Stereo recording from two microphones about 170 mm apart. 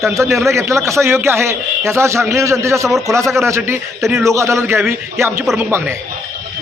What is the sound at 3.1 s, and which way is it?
Speech, 15° right (ahead or behind).